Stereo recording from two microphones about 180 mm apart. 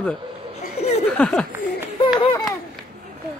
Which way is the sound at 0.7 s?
35° left (ahead or behind).